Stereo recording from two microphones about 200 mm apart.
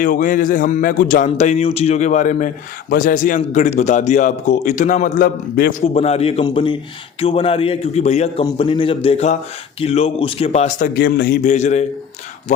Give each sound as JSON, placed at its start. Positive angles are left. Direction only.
{"t": 0.0, "sound": "a man's voice", "side_deg": 40}
{"t": 5.9, "sound": "a man's voice", "side_deg": 30}